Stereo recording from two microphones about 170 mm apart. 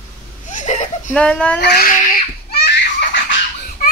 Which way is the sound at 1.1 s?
5° left (ahead or behind).